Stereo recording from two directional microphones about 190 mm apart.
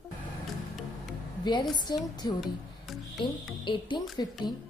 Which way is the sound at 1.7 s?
20° left (ahead or behind).